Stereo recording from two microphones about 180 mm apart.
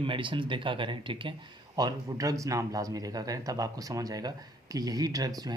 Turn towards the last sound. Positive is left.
turn(degrees=-20)  # may be behind; listen again after turning